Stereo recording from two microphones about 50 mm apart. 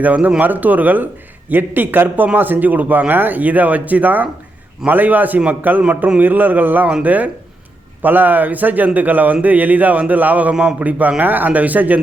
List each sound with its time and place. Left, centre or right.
0.0 s a man's voice: right